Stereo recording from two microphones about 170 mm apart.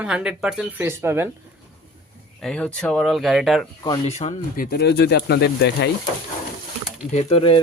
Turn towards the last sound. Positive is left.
turn(degrees=35)  # may be behind; listen again after turning